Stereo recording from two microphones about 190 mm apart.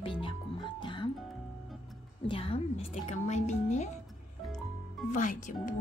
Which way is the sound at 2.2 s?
30° left (ahead or behind).